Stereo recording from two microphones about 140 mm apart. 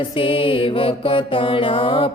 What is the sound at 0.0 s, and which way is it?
Mantra, 40° left (ahead or behind).